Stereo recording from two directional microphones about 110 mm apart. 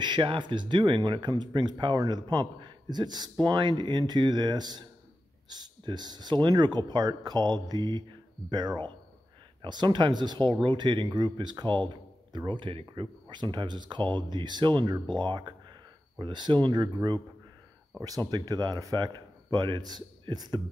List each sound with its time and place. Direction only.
0.0 s speech: 45° right (ahead or behind)
18.3 s speech: 35° right (ahead or behind)